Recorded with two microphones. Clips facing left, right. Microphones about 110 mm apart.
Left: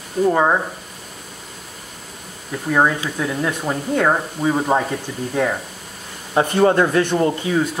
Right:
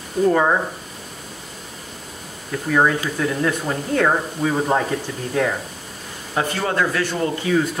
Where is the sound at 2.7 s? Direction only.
15° left (ahead or behind).